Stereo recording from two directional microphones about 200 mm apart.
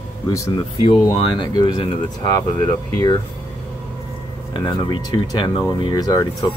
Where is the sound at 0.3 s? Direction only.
20° left (ahead or behind).